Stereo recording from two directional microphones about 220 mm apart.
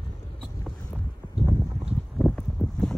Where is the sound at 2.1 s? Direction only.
Centre (ahead or behind).